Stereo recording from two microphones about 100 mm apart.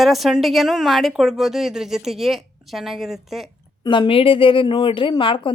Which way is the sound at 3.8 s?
55° left (ahead or behind).